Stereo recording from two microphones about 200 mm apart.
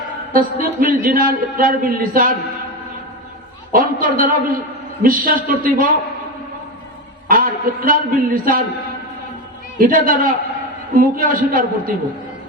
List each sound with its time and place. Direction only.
0.3 s a man's voice: 45° right (ahead or behind)
3.7 s a man's voice: 45° right (ahead or behind)
7.3 s a man's voice: 45° right (ahead or behind)
9.7 s a man's voice: 45° right (ahead or behind)